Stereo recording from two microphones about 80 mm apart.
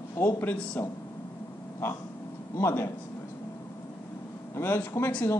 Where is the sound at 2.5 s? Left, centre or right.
Left.